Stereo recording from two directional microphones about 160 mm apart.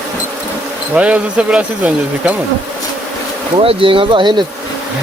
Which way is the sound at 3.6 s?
35° right (ahead or behind).